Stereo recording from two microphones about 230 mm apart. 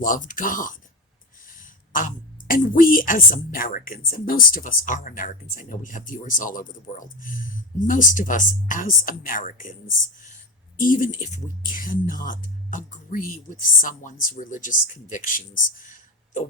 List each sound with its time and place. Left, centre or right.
0.0 s a woman's voice: left
10.8 s a woman's voice: left